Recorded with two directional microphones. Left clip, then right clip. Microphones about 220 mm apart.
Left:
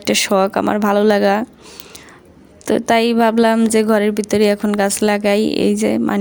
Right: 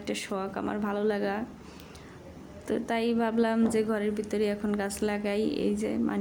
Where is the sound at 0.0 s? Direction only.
45° left (ahead or behind).